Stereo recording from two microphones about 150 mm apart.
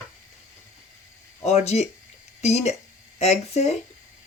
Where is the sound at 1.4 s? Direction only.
45° left (ahead or behind).